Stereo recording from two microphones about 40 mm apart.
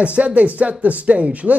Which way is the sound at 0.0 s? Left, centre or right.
Right.